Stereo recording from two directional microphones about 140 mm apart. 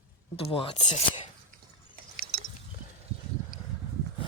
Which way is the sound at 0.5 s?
40° left (ahead or behind).